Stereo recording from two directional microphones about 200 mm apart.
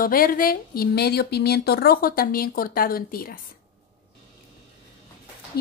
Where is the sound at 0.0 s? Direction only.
45° left (ahead or behind).